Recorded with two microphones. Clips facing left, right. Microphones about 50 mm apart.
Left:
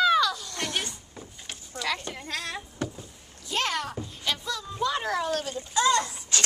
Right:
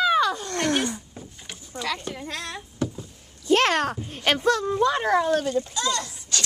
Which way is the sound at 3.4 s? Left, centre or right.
Right.